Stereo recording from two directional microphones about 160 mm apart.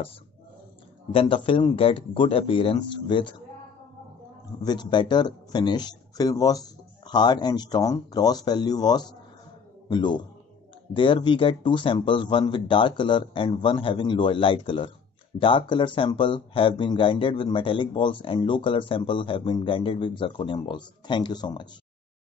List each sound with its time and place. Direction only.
1.1 s speech: 30° left (ahead or behind)
4.6 s speech: 25° left (ahead or behind)